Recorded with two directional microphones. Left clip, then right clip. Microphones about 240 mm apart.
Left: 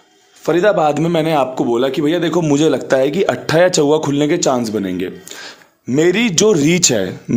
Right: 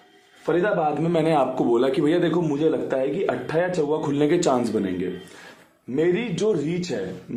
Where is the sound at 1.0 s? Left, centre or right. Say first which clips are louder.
Left 5 dB; left.